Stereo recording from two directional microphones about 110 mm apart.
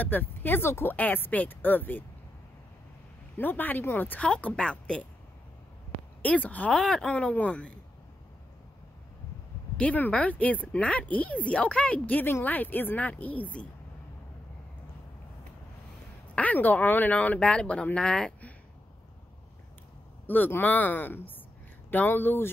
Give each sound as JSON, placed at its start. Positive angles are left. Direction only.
{"t": 0.0, "sound": "speech", "side_deg": 15}
{"t": 3.3, "sound": "speech", "side_deg": 15}
{"t": 6.2, "sound": "speech", "side_deg": 15}
{"t": 9.8, "sound": "speech", "side_deg": 15}
{"t": 16.3, "sound": "speech", "side_deg": 15}
{"t": 20.2, "sound": "speech", "side_deg": 20}